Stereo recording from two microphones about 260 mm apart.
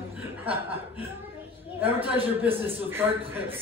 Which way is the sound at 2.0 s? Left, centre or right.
Right.